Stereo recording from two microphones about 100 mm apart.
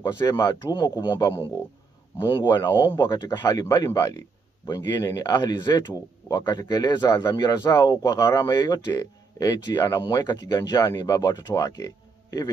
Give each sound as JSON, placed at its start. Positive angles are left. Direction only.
{"t": 0.2, "sound": "speech", "side_deg": 30}
{"t": 0.5, "sound": "speech", "side_deg": 45}
{"t": 2.5, "sound": "speech", "side_deg": 45}